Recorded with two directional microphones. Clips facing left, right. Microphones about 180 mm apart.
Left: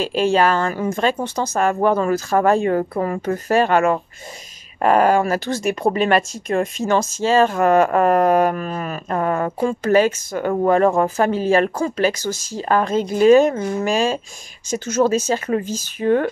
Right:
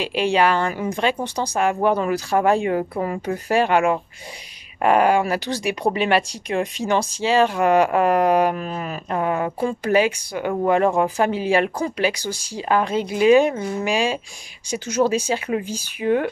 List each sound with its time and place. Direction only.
0.0 s speech: 45° left (ahead or behind)
1.2 s speech: 15° right (ahead or behind)
4.8 s speech: 40° left (ahead or behind)
6.9 s speech: 15° right (ahead or behind)
7.2 s speech: 45° left (ahead or behind)
9.7 s speech: 15° right (ahead or behind)
10.3 s speech: 45° left (ahead or behind)
11.0 s speech: 15° right (ahead or behind)
12.6 s speech: 45° left (ahead or behind)
14.9 s speech: 15° right (ahead or behind)